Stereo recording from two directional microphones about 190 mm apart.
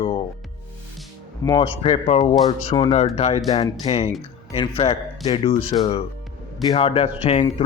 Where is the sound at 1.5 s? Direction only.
25° left (ahead or behind).